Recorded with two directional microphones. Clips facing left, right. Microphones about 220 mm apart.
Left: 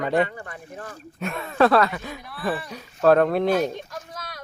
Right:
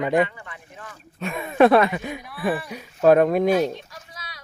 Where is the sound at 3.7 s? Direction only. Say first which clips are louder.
Left 4 dB; 50° left (ahead or behind).